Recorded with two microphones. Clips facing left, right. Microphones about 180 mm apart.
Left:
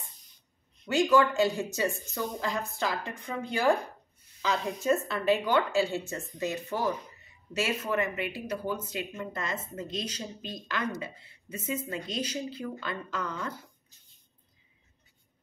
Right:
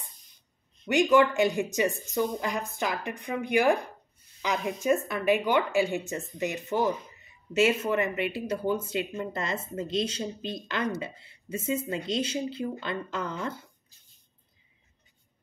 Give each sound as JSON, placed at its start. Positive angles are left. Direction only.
{"t": 0.8, "sound": "speech", "side_deg": -20}